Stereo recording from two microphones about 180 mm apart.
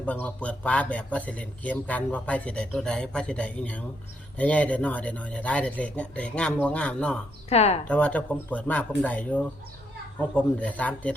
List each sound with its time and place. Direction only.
0.0 s a man's voice: 10° left (ahead or behind)
7.5 s speech: 35° left (ahead or behind)
7.9 s a man's voice: 10° left (ahead or behind)